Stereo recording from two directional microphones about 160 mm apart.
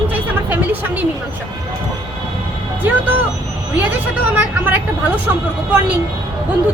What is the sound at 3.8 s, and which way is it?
A woman's voice, 10° right (ahead or behind).